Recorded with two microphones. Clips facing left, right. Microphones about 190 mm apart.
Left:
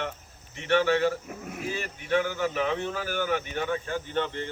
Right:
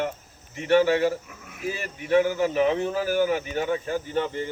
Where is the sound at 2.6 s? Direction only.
15° right (ahead or behind).